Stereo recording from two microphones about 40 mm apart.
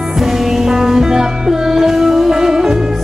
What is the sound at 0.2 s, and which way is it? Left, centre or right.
Music, centre.